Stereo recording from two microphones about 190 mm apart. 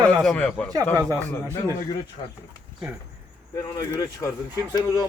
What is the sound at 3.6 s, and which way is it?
A man's voice, 15° left (ahead or behind).